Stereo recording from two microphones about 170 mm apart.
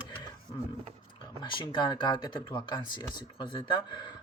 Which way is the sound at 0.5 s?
30° left (ahead or behind).